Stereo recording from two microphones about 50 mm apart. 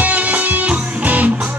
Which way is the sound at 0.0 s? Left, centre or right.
Right.